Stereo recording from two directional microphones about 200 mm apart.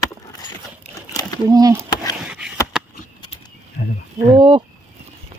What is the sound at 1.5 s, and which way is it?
Speech, 15° right (ahead or behind).